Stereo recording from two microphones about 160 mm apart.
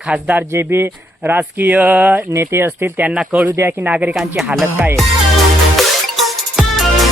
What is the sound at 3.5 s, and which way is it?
Speech, 15° right (ahead or behind).